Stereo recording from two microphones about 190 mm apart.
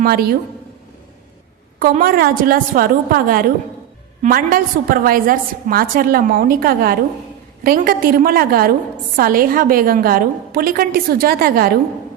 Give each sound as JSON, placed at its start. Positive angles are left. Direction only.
{"t": 0.0, "sound": "a woman's voice", "side_deg": -55}
{"t": 1.8, "sound": "a woman's voice", "side_deg": -50}